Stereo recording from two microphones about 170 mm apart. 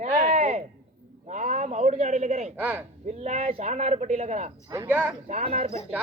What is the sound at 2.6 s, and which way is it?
Speech, 10° right (ahead or behind).